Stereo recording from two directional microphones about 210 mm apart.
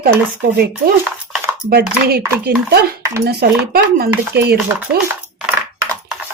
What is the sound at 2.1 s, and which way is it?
Speech, 50° right (ahead or behind).